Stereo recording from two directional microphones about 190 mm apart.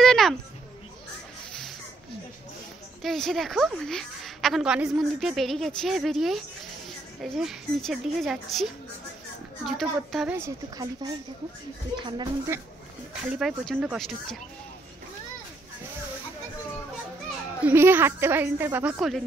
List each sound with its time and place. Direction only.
0.0 s a sound: centre (ahead or behind)
3.0 s a woman's voice: centre (ahead or behind)
10.3 s speech: 15° right (ahead or behind)
13.2 s a woman's voice: 5° right (ahead or behind)
17.6 s a woman's voice: 10° right (ahead or behind)